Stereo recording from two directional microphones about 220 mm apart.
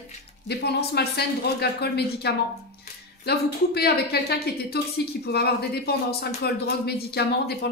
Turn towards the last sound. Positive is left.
turn(degrees=45)  # may be behind; listen again after turning